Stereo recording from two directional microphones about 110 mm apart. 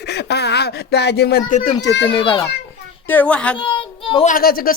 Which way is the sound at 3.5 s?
50° left (ahead or behind).